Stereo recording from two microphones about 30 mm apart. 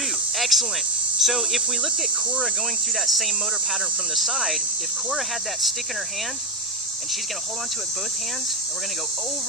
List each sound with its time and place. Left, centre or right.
0.3 s snake: centre
1.2 s speech: centre